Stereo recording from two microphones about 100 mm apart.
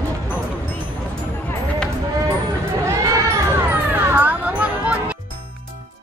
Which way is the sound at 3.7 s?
20° right (ahead or behind).